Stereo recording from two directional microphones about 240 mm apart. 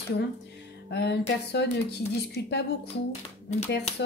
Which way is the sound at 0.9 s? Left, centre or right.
Left.